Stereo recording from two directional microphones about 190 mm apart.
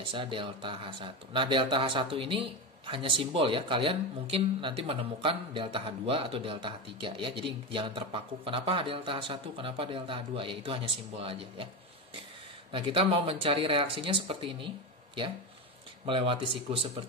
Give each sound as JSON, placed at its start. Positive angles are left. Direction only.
{"t": 0.0, "sound": "a man's voice", "side_deg": -25}
{"t": 12.7, "sound": "a man's voice", "side_deg": -30}
{"t": 16.1, "sound": "a man's voice", "side_deg": -30}